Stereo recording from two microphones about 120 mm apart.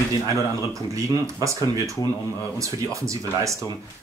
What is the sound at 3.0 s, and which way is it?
Speech, 25° right (ahead or behind).